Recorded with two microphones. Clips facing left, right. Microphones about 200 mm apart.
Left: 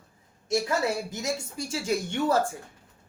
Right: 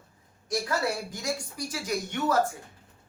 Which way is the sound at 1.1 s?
25° left (ahead or behind).